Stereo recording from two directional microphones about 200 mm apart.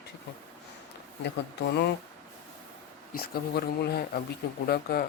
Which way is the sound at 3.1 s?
50° left (ahead or behind).